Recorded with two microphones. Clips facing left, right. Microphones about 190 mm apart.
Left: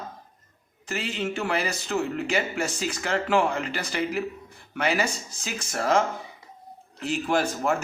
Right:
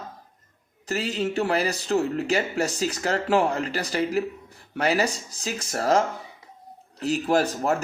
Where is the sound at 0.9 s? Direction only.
40° right (ahead or behind).